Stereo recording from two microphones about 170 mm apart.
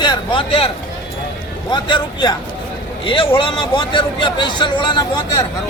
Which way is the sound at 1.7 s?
25° left (ahead or behind).